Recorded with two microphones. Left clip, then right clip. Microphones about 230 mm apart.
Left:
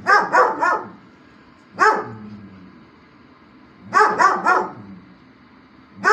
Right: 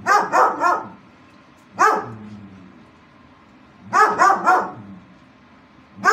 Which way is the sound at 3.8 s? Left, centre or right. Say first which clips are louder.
Even; centre.